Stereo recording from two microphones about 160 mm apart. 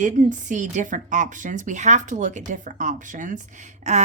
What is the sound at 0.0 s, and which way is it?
Speech, 50° right (ahead or behind).